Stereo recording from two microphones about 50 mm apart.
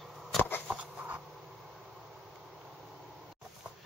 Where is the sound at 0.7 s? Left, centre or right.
Right.